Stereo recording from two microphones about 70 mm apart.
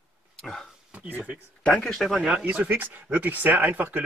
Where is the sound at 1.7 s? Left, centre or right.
Centre.